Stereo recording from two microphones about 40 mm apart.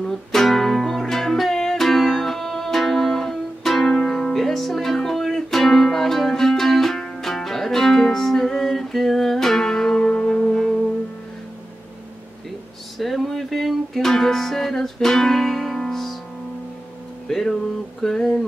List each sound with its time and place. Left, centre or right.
0.3 s music: centre
7.0 s music: centre
12.9 s music: centre
17.3 s a sound: centre